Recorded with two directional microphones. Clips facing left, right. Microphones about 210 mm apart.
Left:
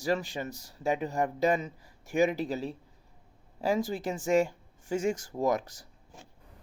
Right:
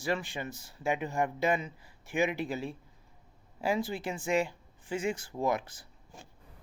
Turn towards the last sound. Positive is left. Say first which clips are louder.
# left 3 dB
turn(degrees=40)  # may be behind; listen again after turning